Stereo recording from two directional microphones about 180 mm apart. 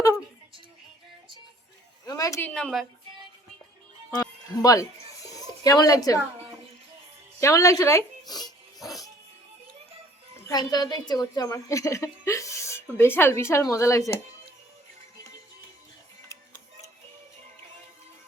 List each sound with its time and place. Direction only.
2.0 s a sound: 20° left (ahead or behind)
2.5 s a woman's voice: 5° left (ahead or behind)
4.2 s speech: 20° left (ahead or behind)
7.3 s a woman's voice: 15° left (ahead or behind)
8.3 s music: 20° left (ahead or behind)
10.4 s a woman's voice: 20° left (ahead or behind)